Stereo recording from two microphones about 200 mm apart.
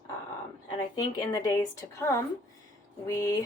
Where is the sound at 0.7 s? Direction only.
20° left (ahead or behind).